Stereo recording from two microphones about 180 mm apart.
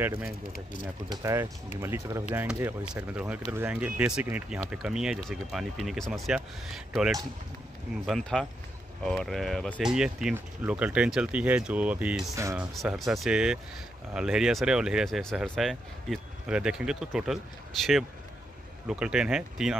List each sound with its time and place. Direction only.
1.0 s speech: 20° right (ahead or behind); by 17.4 s centre (ahead or behind)
18.9 s speech: 5° right (ahead or behind)